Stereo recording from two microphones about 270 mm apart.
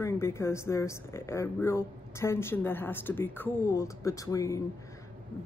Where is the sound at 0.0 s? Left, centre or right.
Centre.